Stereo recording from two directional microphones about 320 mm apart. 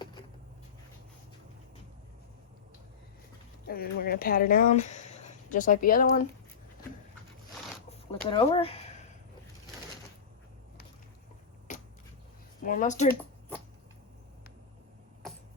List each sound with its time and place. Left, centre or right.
0.0 s a sound: centre
3.7 s speech: left
7.9 s speech: centre
11.7 s finger snapping: left
12.6 s speech: left